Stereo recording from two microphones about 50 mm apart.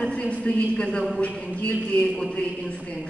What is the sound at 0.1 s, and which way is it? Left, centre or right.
Speech, left.